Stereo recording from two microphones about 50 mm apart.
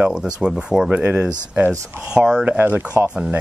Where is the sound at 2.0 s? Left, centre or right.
Centre.